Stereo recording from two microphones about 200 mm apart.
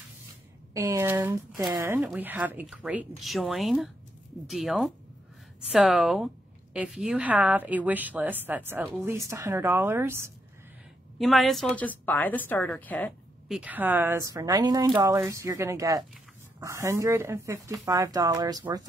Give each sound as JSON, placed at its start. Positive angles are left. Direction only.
{"t": 0.7, "sound": "a woman's voice", "side_deg": -15}
{"t": 11.1, "sound": "a woman's voice", "side_deg": 0}
{"t": 13.5, "sound": "a woman's voice", "side_deg": -5}